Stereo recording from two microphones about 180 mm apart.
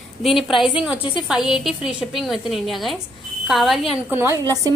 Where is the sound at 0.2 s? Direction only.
Centre (ahead or behind).